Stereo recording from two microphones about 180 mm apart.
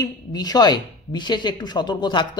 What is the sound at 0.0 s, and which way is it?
A man's voice, 20° left (ahead or behind).